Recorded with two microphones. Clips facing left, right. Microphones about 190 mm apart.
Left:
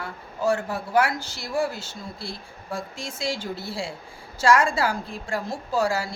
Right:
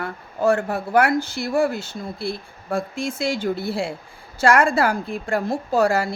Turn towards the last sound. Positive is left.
turn(degrees=-60)  # may be behind; listen again after turning